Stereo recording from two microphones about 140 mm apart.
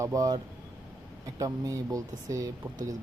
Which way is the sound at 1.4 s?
25° right (ahead or behind).